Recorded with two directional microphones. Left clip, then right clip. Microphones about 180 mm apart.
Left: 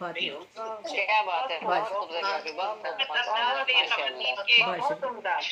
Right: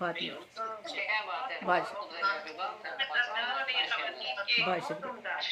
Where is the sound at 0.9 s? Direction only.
50° left (ahead or behind).